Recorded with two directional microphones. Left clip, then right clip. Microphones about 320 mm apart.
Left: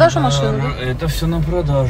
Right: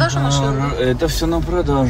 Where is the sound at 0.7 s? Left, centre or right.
Right.